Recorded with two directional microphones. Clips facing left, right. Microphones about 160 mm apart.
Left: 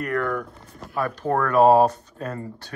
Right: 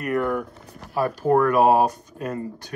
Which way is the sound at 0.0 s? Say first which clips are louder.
Right 2 dB; 10° right (ahead or behind).